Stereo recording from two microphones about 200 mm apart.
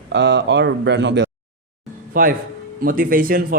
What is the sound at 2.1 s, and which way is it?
Speech, 45° right (ahead or behind).